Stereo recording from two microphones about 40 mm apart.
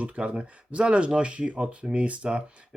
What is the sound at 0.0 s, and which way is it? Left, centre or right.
Speech, right.